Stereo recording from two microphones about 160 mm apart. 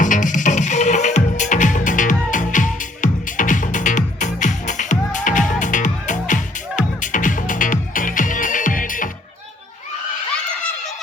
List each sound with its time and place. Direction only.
0.0 s music: 55° left (ahead or behind)